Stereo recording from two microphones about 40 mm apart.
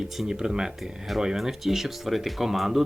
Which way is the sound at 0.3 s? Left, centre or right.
Centre.